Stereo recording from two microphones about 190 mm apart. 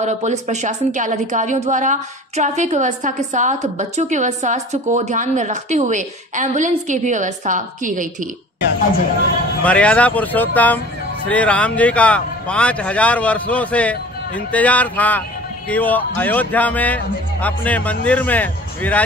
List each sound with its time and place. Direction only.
0.0 s a woman's voice: 35° right (ahead or behind)
9.6 s a man's voice: 5° left (ahead or behind)